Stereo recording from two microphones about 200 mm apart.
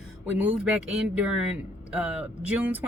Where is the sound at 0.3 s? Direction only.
5° right (ahead or behind).